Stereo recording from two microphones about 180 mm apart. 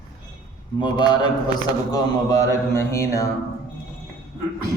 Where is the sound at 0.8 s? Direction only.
25° left (ahead or behind).